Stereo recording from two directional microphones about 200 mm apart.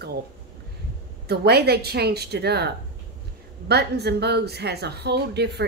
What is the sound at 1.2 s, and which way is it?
A woman's voice, 55° right (ahead or behind).